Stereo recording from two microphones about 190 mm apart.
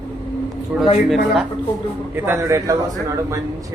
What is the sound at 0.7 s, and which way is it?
Speech, 5° right (ahead or behind).